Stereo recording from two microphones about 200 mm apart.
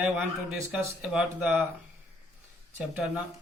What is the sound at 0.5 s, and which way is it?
Speech, 5° right (ahead or behind).